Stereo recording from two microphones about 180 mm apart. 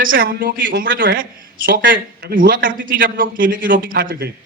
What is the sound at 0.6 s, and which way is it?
A man's voice, 70° right (ahead or behind).